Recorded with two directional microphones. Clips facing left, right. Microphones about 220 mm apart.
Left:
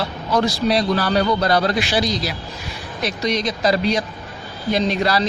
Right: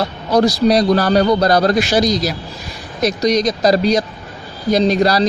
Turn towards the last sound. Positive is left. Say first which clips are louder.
# right 5 dB
turn(degrees=-40)  # may be behind; listen again after turning